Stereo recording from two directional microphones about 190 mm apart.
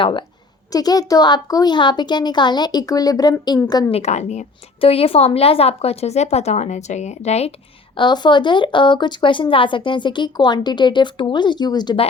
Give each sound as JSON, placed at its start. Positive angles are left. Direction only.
{"t": 0.0, "sound": "speech", "side_deg": 25}
{"t": 3.9, "sound": "a woman's voice", "side_deg": 35}
{"t": 7.9, "sound": "speech", "side_deg": 25}